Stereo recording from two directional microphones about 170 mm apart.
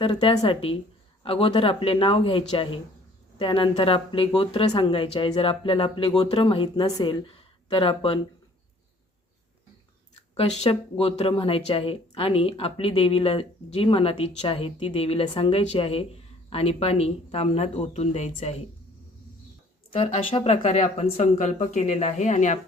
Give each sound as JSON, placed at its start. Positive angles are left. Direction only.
{"t": 0.0, "sound": "speech", "side_deg": 30}
{"t": 10.3, "sound": "speech", "side_deg": 35}
{"t": 19.9, "sound": "speech", "side_deg": 35}